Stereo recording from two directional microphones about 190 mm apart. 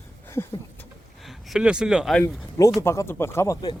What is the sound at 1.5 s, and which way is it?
Speech, 5° right (ahead or behind).